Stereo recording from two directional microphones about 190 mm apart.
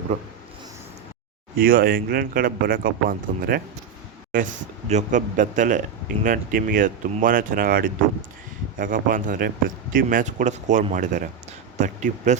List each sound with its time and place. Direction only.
1.5 s speech: 50° right (ahead or behind)